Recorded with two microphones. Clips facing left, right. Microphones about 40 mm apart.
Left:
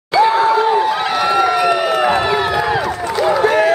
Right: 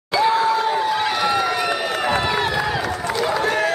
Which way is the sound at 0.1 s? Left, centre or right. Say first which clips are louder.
Left 5 dB; centre.